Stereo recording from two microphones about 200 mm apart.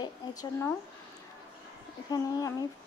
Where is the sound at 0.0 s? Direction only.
20° left (ahead or behind).